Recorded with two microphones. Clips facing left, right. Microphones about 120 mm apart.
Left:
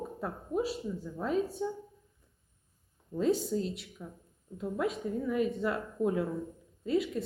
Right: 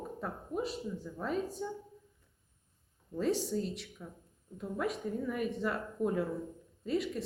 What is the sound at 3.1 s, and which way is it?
Speech, centre (ahead or behind).